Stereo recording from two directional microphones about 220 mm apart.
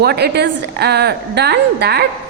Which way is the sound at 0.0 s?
45° right (ahead or behind).